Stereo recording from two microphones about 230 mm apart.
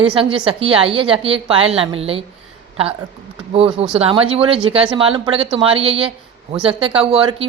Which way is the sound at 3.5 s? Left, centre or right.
Right.